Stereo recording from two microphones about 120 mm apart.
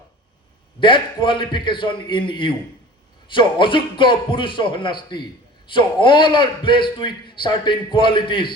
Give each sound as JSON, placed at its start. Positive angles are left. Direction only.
{"t": 0.8, "sound": "a man's voice", "side_deg": 45}